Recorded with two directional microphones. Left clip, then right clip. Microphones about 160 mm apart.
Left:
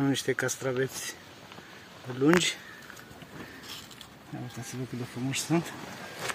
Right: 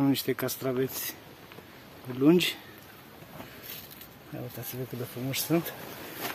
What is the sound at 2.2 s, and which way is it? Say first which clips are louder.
Speech: right 1 dB; 20° right (ahead or behind).